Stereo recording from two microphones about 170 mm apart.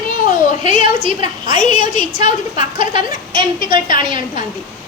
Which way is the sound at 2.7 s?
30° right (ahead or behind).